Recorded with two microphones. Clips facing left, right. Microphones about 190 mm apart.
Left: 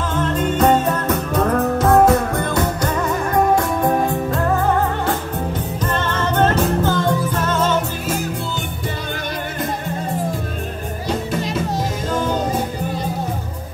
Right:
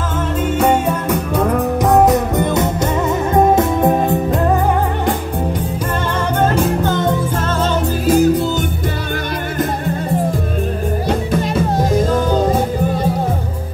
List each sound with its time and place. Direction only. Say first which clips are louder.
0.4 s music: right 1 dB; 10° right (ahead or behind)
6.3 s music: right 1 dB; 10° right (ahead or behind)
8.1 s music: right 15 dB; 40° right (ahead or behind)
11.1 s music: right 2 dB; 55° right (ahead or behind)